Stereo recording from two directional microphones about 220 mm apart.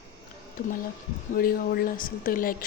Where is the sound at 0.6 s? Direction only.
40° left (ahead or behind).